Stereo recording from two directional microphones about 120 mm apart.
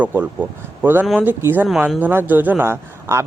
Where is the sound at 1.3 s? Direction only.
15° right (ahead or behind).